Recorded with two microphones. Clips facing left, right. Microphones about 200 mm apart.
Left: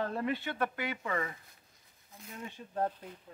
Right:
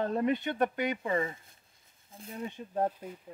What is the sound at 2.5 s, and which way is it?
Speech, 20° right (ahead or behind).